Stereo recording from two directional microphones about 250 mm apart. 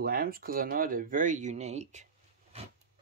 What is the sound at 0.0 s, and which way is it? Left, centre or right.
Speech, right.